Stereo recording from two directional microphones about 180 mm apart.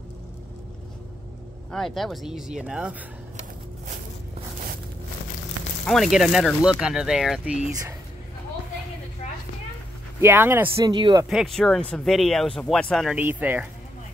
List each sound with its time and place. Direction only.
1.7 s speech: centre (ahead or behind)
5.9 s speech: centre (ahead or behind)
10.2 s speech: 10° right (ahead or behind)
10.9 s speech: 25° right (ahead or behind)
11.2 s speech: centre (ahead or behind)